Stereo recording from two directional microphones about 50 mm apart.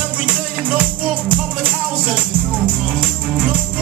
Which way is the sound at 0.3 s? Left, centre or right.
Right.